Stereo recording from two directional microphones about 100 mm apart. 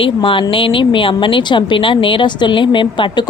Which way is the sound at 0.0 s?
60° left (ahead or behind).